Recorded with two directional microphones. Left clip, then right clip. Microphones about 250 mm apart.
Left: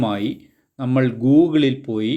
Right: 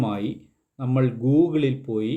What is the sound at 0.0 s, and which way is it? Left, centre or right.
Speech, centre.